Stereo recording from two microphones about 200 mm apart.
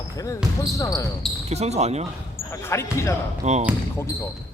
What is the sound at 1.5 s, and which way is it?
Speech, 35° right (ahead or behind).